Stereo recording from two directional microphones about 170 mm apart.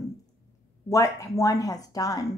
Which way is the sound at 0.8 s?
20° left (ahead or behind).